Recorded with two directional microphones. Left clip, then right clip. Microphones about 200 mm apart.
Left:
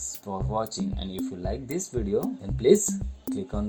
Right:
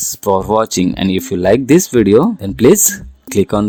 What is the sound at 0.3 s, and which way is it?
Speech, 45° right (ahead or behind).